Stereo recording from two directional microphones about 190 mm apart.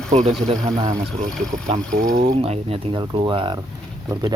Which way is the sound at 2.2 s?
30° right (ahead or behind).